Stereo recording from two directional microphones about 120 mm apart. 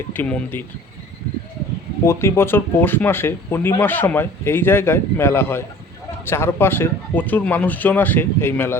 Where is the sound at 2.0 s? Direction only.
20° left (ahead or behind).